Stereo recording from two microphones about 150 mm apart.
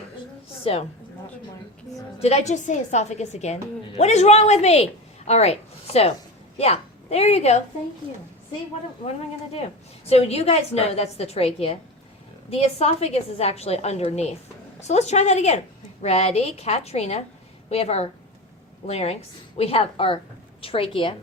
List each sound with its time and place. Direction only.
0.6 s a woman's voice: 40° left (ahead or behind)
2.1 s a woman's voice: 45° left (ahead or behind)
10.1 s a woman's voice: 45° left (ahead or behind)